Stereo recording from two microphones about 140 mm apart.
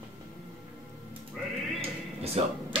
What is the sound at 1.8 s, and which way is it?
Music, 45° right (ahead or behind).